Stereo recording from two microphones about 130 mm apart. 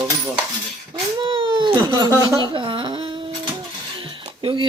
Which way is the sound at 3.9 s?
40° right (ahead or behind).